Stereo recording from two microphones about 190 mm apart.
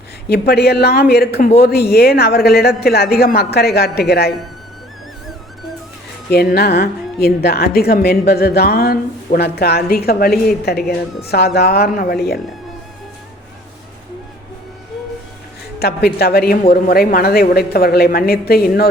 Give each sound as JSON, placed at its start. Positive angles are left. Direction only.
{"t": 0.3, "sound": "a woman's voice", "side_deg": 55}
{"t": 6.3, "sound": "a woman's voice", "side_deg": 55}
{"t": 15.8, "sound": "a woman's voice", "side_deg": 55}